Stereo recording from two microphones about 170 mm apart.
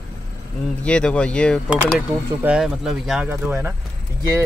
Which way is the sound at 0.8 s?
5° left (ahead or behind).